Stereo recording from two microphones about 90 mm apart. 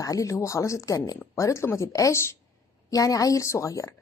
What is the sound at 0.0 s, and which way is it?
A woman's voice, 40° left (ahead or behind).